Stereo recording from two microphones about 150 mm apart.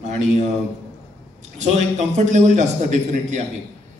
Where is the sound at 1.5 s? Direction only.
50° right (ahead or behind).